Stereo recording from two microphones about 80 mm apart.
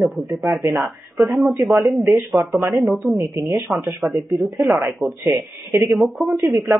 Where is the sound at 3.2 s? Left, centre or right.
Right.